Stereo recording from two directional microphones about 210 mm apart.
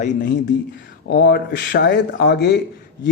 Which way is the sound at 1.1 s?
50° left (ahead or behind).